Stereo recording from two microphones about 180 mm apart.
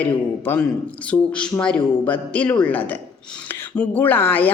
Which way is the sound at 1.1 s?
5° left (ahead or behind).